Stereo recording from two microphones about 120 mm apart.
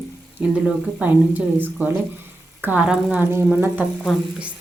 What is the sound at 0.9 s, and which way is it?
Speech, 15° right (ahead or behind).